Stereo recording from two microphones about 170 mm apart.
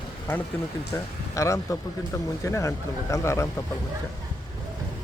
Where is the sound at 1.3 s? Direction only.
20° left (ahead or behind).